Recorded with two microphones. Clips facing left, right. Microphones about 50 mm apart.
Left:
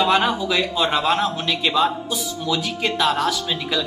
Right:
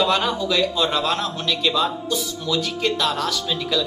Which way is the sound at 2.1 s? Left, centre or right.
Centre.